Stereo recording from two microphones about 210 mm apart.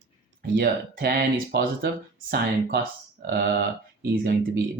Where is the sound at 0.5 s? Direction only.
50° right (ahead or behind).